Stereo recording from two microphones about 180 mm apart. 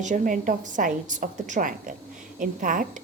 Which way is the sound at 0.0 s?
45° right (ahead or behind).